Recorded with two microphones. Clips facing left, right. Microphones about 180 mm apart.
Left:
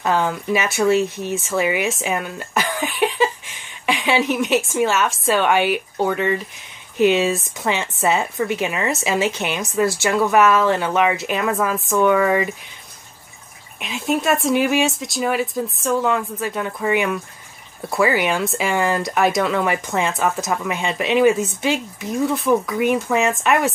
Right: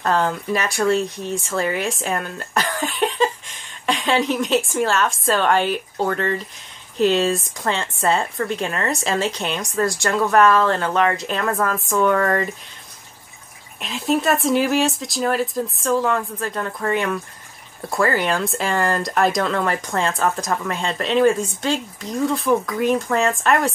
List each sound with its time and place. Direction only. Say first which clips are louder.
0.0 s speech: even; 5° left (ahead or behind)
13.7 s speech: right 1 dB; centre (ahead or behind)